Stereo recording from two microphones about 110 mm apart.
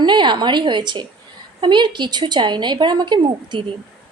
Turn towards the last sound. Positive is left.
turn(degrees=-45)  # may be behind; listen again after turning